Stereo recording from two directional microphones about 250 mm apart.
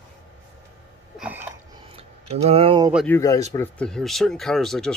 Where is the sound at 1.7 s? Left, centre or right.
Right.